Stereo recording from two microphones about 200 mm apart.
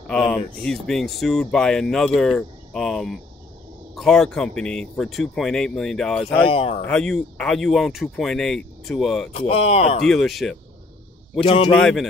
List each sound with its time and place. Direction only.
0.0 s a sound: 5° left (ahead or behind)
0.6 s speech: 5° left (ahead or behind)
6.4 s speech: 30° left (ahead or behind)
6.9 s speech: 5° left (ahead or behind)
9.5 s speech: 30° left (ahead or behind)
10.0 s speech: centre (ahead or behind)
11.4 s speech: 30° left (ahead or behind)
11.7 s speech: centre (ahead or behind)